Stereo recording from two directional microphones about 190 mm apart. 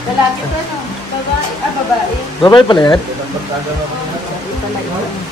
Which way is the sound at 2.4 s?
20° left (ahead or behind).